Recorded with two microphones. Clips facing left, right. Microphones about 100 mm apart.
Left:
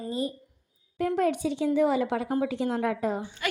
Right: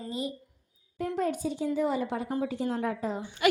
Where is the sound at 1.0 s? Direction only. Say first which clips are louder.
Left 4 dB; 75° left (ahead or behind).